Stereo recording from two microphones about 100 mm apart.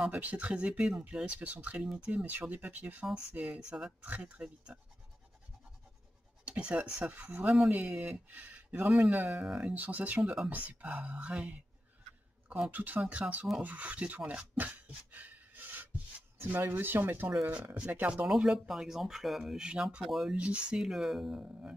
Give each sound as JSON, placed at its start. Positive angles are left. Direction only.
{"t": 0.0, "sound": "speech", "side_deg": -15}
{"t": 6.4, "sound": "speech", "side_deg": -10}